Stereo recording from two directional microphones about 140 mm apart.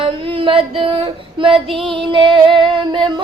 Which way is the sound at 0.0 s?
40° right (ahead or behind).